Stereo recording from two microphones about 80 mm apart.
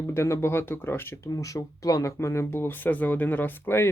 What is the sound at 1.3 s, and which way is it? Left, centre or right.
Speech, left.